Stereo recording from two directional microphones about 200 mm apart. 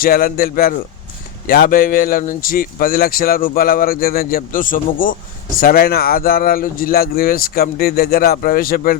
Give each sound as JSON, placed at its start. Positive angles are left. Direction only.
{"t": 0.0, "sound": "speech", "side_deg": 45}